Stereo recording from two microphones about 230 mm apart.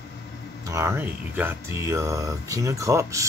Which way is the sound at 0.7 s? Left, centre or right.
Centre.